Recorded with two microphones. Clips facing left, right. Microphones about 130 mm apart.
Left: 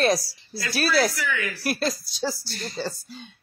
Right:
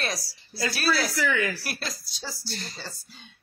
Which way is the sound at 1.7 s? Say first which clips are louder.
Left 10 dB; 45° left (ahead or behind).